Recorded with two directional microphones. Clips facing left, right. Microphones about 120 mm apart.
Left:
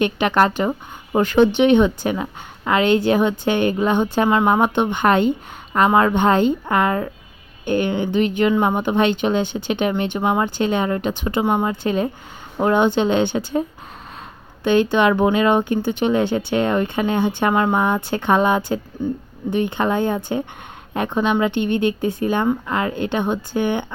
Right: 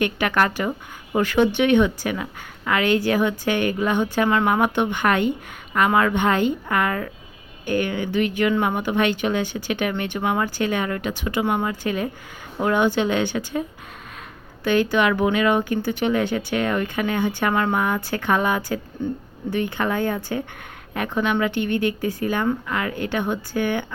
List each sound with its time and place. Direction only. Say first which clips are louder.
0.0 s speech: left 4 dB; 25° left (ahead or behind)
19.0 s speech: left 3 dB; 10° left (ahead or behind)
19.5 s speech: left 4 dB; 20° left (ahead or behind)